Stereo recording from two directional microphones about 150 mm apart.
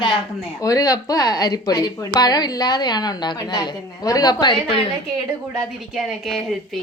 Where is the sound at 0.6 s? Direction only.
25° left (ahead or behind).